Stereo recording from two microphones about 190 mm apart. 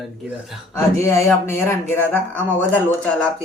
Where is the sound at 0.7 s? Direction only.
15° left (ahead or behind).